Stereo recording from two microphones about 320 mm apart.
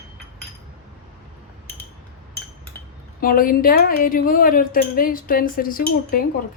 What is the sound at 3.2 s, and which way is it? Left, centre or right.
A woman's voice, left.